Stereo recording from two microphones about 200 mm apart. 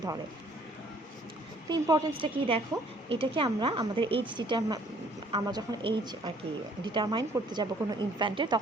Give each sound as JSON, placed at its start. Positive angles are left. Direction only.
{"t": 1.7, "sound": "a woman's voice", "side_deg": -25}